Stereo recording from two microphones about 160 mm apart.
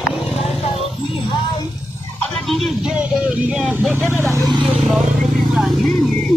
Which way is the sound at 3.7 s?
10° right (ahead or behind).